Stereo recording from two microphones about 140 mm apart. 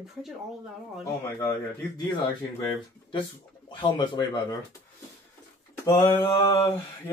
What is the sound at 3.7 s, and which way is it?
Speech, 30° left (ahead or behind).